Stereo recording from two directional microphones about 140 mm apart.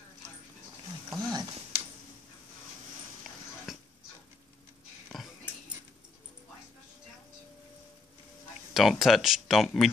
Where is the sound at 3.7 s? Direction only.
Centre (ahead or behind).